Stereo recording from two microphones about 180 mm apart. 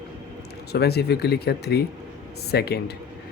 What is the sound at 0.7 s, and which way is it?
Speech, 65° left (ahead or behind).